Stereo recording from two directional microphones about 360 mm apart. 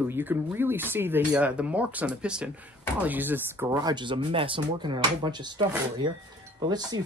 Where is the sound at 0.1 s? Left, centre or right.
Centre.